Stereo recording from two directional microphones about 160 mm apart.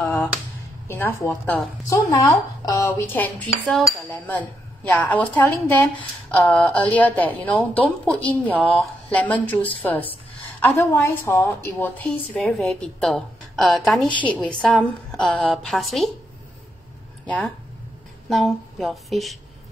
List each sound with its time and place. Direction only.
0.0 s a sound: 10° left (ahead or behind)
0.8 s a woman's voice: 15° left (ahead or behind)
18.3 s a woman's voice: centre (ahead or behind)